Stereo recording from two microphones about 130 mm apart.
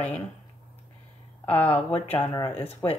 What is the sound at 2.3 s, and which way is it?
Speech, 25° left (ahead or behind).